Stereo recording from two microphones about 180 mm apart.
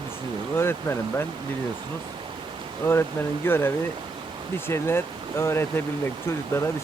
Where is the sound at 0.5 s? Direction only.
15° left (ahead or behind).